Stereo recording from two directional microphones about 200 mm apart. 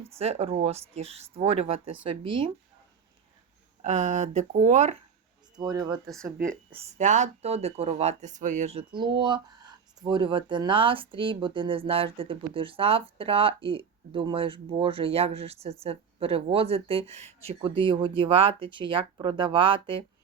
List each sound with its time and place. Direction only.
0.2 s speech: 30° right (ahead or behind)
3.8 s speech: 35° right (ahead or behind)
5.5 s speech: 20° right (ahead or behind)
6.3 s a woman's voice: 45° right (ahead or behind); by 20.1 s 25° right (ahead or behind)